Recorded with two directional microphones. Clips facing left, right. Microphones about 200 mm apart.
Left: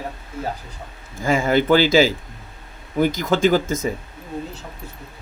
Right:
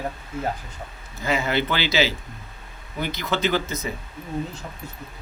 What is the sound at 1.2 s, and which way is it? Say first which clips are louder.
Speech: left 5 dB; 50° left (ahead or behind).